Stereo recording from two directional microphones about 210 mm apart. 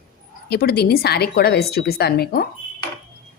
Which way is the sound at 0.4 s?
50° left (ahead or behind).